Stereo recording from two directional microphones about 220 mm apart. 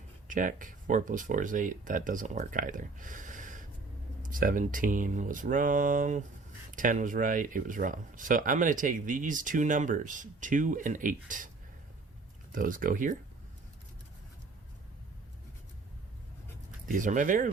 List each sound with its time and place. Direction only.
0.3 s speech: 35° right (ahead or behind)
16.9 s speech: 35° right (ahead or behind)